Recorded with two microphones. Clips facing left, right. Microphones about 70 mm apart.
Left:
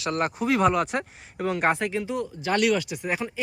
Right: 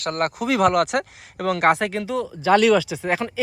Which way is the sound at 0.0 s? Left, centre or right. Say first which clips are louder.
Right 2 dB; right.